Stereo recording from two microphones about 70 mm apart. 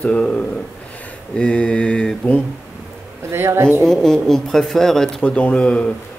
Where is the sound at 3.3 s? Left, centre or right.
Right.